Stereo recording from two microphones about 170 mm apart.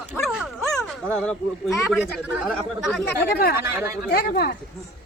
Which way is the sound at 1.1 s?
5° left (ahead or behind).